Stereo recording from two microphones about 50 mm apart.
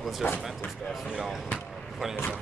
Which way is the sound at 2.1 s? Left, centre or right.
Left.